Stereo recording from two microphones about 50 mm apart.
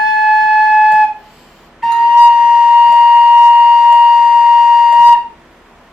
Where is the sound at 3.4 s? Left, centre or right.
Centre.